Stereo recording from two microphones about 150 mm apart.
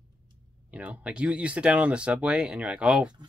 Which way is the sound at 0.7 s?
10° right (ahead or behind).